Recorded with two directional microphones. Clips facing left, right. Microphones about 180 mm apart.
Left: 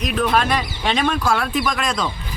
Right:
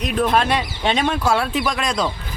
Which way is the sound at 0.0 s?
30° right (ahead or behind).